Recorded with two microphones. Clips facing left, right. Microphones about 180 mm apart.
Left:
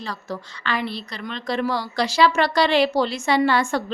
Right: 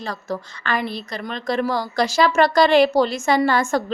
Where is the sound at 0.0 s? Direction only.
45° right (ahead or behind).